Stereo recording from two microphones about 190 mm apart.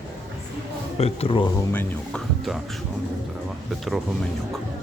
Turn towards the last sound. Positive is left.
turn(degrees=0)  # may be behind; listen again after turning